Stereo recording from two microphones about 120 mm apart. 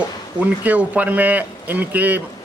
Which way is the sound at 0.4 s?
10° right (ahead or behind).